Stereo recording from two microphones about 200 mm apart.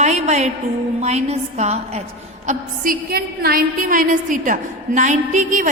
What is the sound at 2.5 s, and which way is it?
A woman's voice, 45° right (ahead or behind).